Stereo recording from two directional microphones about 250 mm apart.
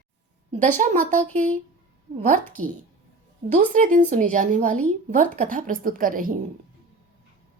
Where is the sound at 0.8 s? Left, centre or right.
Right.